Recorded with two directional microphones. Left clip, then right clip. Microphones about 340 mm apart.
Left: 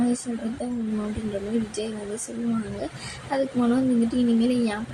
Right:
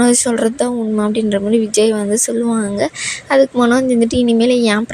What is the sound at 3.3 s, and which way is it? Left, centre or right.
A woman's voice, right.